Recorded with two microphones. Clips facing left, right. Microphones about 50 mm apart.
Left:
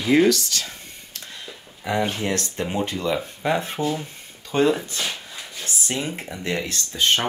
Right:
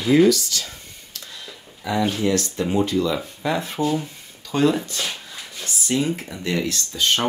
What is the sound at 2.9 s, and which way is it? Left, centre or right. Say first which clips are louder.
Speech: right 3 dB; left.